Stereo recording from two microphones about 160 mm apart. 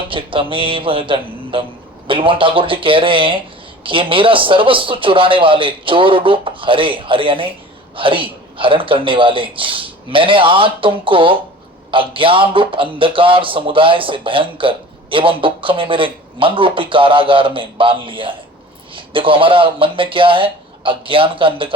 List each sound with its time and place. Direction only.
0.1 s speech: 35° right (ahead or behind)